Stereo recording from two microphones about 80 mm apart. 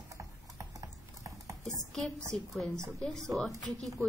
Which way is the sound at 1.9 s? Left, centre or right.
Centre.